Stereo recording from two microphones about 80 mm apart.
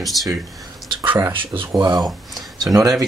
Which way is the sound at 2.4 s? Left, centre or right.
Right.